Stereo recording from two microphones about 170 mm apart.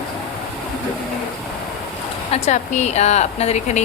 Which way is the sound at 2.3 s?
45° left (ahead or behind).